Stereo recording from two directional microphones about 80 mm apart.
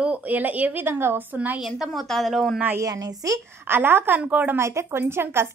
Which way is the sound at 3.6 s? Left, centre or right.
Right.